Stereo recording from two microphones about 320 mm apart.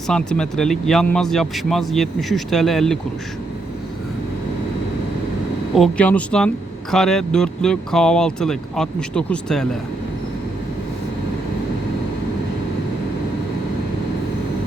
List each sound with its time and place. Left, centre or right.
0.1 s speech: centre
5.7 s speech: centre